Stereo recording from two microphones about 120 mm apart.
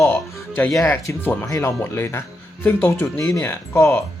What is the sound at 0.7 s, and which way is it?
Speech, 20° left (ahead or behind).